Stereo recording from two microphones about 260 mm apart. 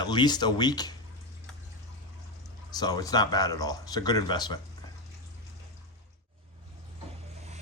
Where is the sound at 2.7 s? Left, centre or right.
Centre.